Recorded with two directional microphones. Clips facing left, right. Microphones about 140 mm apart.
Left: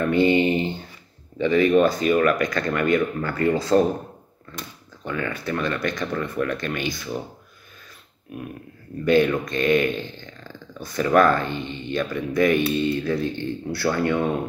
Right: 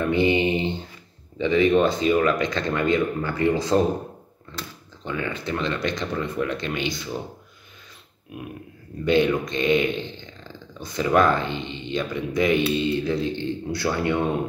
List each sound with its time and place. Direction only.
0.0 s speech: 20° right (ahead or behind)
5.0 s speech: 20° right (ahead or behind)
9.0 s speech: 20° right (ahead or behind)